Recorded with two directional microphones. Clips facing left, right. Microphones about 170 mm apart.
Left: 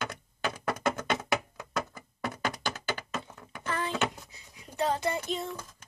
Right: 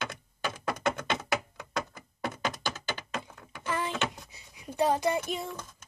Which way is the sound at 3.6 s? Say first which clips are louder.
Even; 15° right (ahead or behind).